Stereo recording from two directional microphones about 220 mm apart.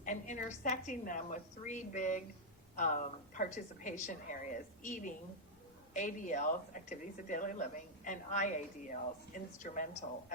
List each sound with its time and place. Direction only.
0.0 s speech: 35° left (ahead or behind)